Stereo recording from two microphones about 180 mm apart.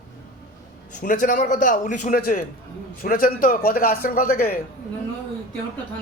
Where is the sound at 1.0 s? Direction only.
45° left (ahead or behind).